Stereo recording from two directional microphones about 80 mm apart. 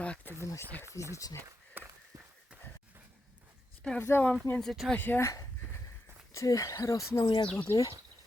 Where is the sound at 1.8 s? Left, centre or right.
Right.